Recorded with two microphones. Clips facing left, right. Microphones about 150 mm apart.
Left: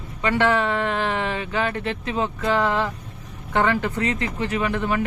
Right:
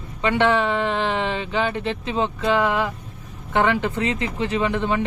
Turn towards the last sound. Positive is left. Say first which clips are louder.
# right 1 dB
turn(degrees=-20)  # may be behind; listen again after turning